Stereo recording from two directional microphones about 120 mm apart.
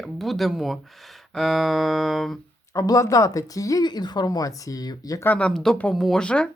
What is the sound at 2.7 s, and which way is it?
Speech, 30° left (ahead or behind).